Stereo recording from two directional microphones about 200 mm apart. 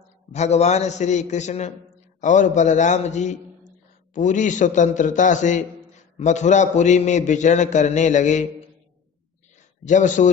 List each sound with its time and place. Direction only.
0.3 s a man's voice: 35° left (ahead or behind)
9.8 s a man's voice: 40° left (ahead or behind)